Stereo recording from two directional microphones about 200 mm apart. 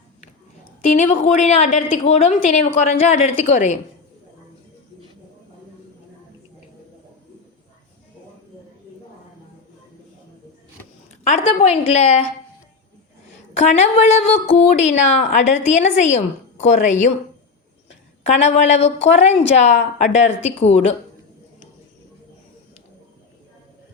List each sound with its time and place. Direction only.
0.9 s a woman's voice: 35° left (ahead or behind)
11.2 s a woman's voice: 35° left (ahead or behind)
13.6 s a woman's voice: 35° left (ahead or behind)
18.2 s a woman's voice: 35° left (ahead or behind)